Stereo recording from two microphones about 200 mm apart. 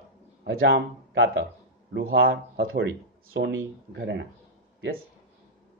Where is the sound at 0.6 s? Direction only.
65° right (ahead or behind).